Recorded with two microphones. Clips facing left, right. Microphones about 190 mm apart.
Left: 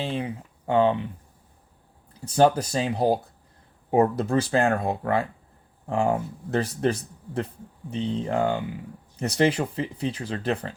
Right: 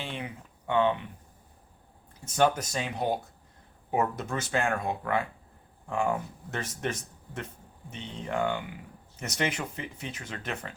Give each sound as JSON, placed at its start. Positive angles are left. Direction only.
{"t": 0.0, "sound": "speech", "side_deg": 35}
{"t": 2.2, "sound": "speech", "side_deg": 35}